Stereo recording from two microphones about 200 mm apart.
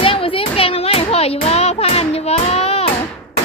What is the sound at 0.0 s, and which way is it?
Music, 25° left (ahead or behind).